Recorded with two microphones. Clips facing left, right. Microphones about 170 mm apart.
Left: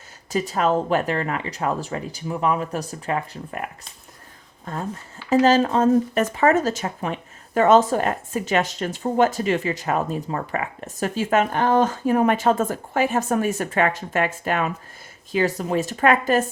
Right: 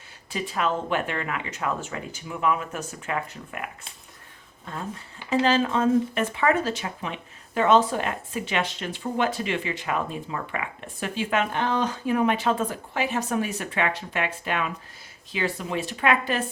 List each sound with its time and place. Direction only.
0.3 s speech: 40° left (ahead or behind)